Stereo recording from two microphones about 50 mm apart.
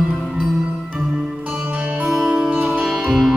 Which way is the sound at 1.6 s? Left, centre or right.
Right.